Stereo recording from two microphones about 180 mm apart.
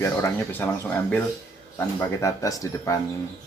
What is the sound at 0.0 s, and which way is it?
Speech, 10° left (ahead or behind).